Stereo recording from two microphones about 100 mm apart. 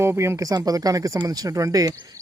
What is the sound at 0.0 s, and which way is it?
Speech, 25° right (ahead or behind).